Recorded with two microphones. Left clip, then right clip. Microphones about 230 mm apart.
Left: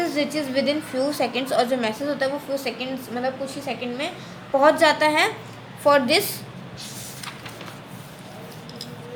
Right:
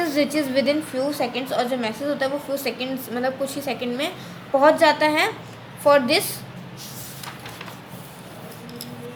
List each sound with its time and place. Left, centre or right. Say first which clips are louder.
0.0 s a woman's voice: right 2 dB; centre
0.9 s a woman's voice: left 1 dB; centre
2.6 s a woman's voice: right 1 dB; centre
4.5 s a woman's voice: right 1 dB; centre